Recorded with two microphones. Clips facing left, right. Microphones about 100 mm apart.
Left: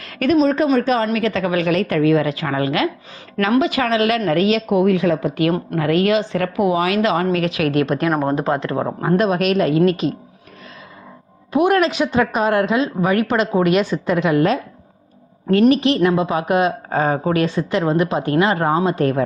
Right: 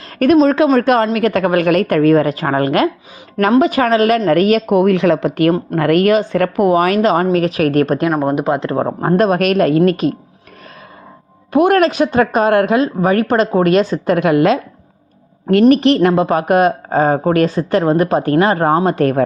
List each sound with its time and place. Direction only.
0.2 s speech: 50° right (ahead or behind)
0.4 s speech: 80° right
0.7 s a woman's voice: 55° right (ahead or behind); by 5.5 s 75° right (ahead or behind)
5.7 s a woman's voice: 55° right (ahead or behind)
8.2 s speech: 15° right (ahead or behind)
8.6 s a woman's voice: 35° right (ahead or behind); by 10.2 s 50° right (ahead or behind)
11.5 s a woman's voice: 50° right (ahead or behind)
14.3 s a woman's voice: 90° right
15.7 s a woman's voice: 55° right (ahead or behind)
16.9 s a woman's voice: 40° right (ahead or behind)
18.9 s a woman's voice: 55° right (ahead or behind)